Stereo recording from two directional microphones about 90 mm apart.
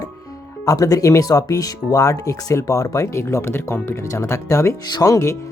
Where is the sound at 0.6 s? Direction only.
40° left (ahead or behind).